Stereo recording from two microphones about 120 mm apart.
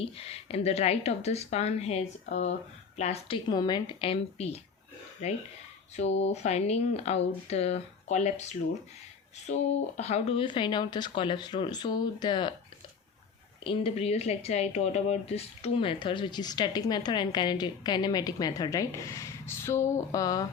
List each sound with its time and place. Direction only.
0.0 s speech: 55° left (ahead or behind)
3.0 s a woman's voice: 55° left (ahead or behind); by 8.4 s 70° left (ahead or behind)
10.0 s speech: 60° left (ahead or behind); by 12.5 s 40° left (ahead or behind)
13.7 s speech: 55° left (ahead or behind); by 20.5 s 30° left (ahead or behind)